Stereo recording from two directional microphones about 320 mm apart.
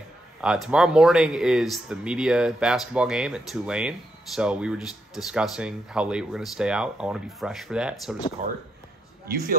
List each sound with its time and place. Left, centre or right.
0.4 s speech: centre
8.4 s speech: right